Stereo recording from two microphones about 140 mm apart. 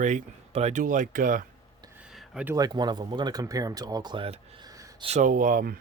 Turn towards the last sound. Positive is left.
turn(degrees=-80)